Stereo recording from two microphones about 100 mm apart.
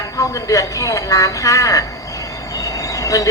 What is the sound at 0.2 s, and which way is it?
A man's voice, 35° left (ahead or behind).